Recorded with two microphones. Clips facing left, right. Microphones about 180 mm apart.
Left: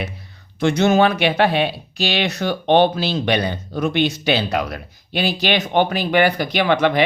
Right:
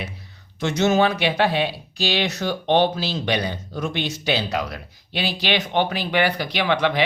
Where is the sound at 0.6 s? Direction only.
60° left (ahead or behind).